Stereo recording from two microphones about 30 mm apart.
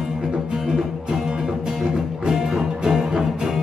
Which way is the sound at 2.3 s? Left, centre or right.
Centre.